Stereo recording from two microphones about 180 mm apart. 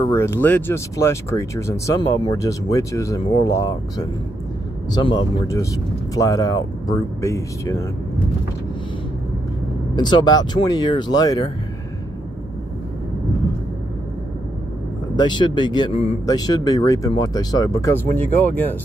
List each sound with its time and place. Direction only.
0.0 s speech: 15° left (ahead or behind)
4.9 s speech: 25° left (ahead or behind)
9.9 s speech: 25° left (ahead or behind)
15.1 s speech: 25° left (ahead or behind)
16.3 s speech: 20° left (ahead or behind)